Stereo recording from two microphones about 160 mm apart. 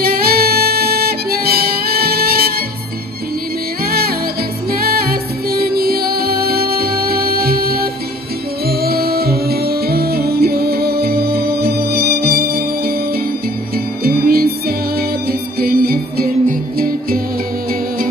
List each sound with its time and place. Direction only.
0.0 s music: 70° right (ahead or behind)
4.7 s music: 70° right (ahead or behind)
14.0 s music: 70° right (ahead or behind)
15.6 s music: 70° right (ahead or behind)